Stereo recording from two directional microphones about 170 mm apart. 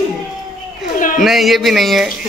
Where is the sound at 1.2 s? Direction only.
Centre (ahead or behind).